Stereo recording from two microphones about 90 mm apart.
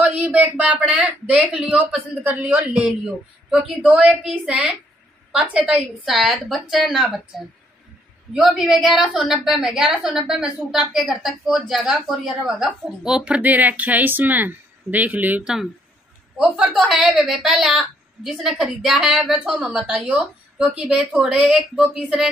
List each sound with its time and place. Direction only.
0.0 s a woman's voice: 15° right (ahead or behind)
15.4 s a woman's voice: 5° right (ahead or behind)